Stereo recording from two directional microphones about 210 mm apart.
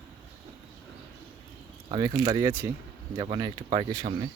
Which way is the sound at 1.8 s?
25° right (ahead or behind).